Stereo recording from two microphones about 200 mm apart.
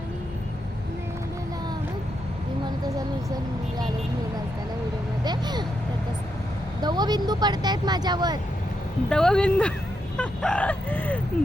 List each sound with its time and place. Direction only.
5.2 s vehicle: 20° right (ahead or behind)
6.8 s speech: 20° right (ahead or behind)
9.0 s speech: 5° left (ahead or behind)